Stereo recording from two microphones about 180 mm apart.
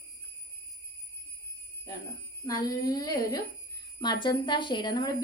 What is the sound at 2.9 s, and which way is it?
A woman's voice, 20° left (ahead or behind).